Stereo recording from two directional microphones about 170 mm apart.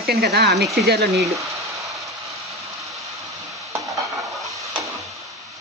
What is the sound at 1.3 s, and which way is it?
Speech, 20° right (ahead or behind).